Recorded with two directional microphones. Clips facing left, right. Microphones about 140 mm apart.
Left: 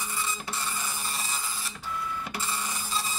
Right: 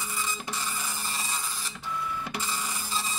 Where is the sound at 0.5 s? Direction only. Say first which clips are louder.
Even; 15° right (ahead or behind).